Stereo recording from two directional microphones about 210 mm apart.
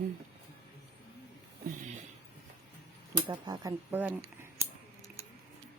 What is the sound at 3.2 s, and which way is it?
Speech, 20° right (ahead or behind).